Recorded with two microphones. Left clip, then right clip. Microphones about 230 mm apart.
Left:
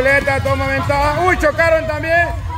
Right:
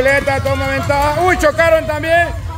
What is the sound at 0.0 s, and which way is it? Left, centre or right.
Speech, centre.